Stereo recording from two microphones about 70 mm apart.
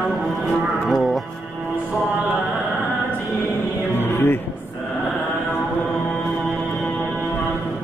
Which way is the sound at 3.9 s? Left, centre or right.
Left.